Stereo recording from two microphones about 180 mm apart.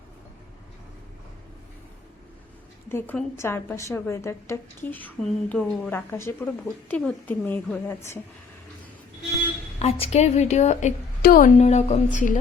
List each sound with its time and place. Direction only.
2.9 s a woman's voice: 10° left (ahead or behind)
9.7 s a woman's voice: 35° left (ahead or behind)